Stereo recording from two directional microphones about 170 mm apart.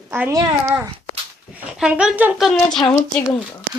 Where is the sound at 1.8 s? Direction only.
5° right (ahead or behind).